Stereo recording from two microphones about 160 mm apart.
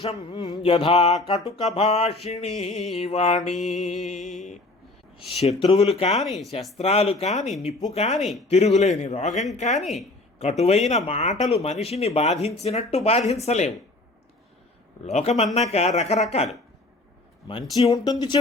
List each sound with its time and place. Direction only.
0.0 s a man's voice: 35° left (ahead or behind)
5.1 s speech: 40° left (ahead or behind)
6.2 s speech: centre (ahead or behind)
6.7 s a man's voice: 40° left (ahead or behind)
9.8 s speech: centre (ahead or behind)
10.6 s speech: 40° left (ahead or behind)
15.0 s a man's voice: 45° left (ahead or behind)
17.5 s speech: 40° left (ahead or behind)
17.9 s speech: 25° left (ahead or behind)